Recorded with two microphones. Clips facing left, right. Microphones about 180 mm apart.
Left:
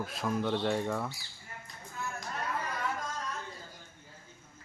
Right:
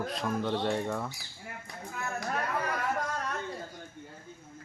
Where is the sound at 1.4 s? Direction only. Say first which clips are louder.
Right 7 dB; 70° right (ahead or behind).